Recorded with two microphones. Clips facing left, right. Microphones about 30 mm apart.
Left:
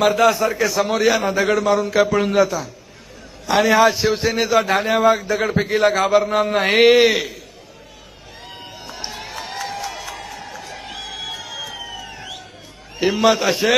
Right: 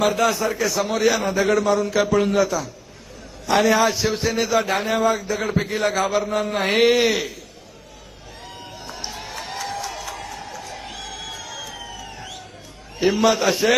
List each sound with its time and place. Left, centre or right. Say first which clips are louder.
0.0 s a man's voice: left 4 dB; left
0.3 s a man's voice: left 4 dB; centre
2.0 s a man's voice: left 3 dB; centre
4.9 s a man's voice: left 4 dB; left
8.4 s run: left 2 dB; left
9.0 s crowd: left 2 dB; centre
9.6 s a sound: left 1 dB; centre
10.3 s a sound: left 1 dB; centre
10.9 s music: left 3 dB; left
13.2 s a man's voice: left 3 dB; centre